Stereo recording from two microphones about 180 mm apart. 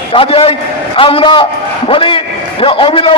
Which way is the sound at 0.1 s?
30° left (ahead or behind).